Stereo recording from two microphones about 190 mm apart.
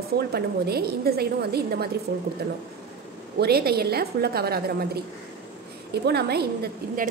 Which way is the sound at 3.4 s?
55° right (ahead or behind).